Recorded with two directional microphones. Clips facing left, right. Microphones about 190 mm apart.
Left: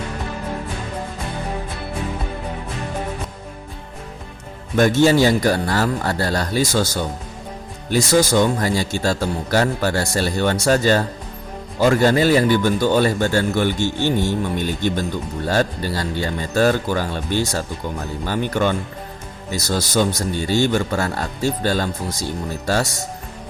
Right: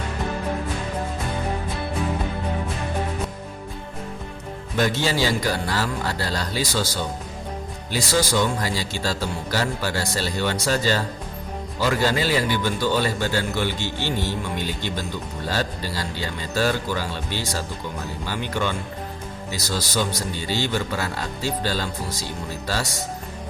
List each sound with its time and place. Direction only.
4.8 s speech: 50° left (ahead or behind)